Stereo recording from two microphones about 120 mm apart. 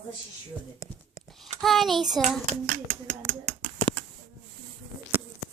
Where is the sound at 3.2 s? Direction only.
30° right (ahead or behind).